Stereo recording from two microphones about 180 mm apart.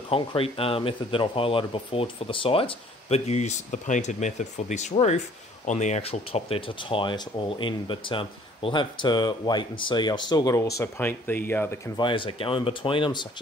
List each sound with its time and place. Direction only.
0.1 s speech: 30° left (ahead or behind); by 11.9 s 10° left (ahead or behind)
12.0 s speech: 25° left (ahead or behind)